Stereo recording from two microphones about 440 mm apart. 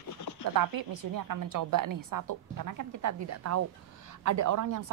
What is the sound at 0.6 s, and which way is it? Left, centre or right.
A woman's voice, right.